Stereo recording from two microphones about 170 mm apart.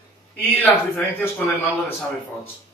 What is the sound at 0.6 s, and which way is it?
Speech, 10° left (ahead or behind).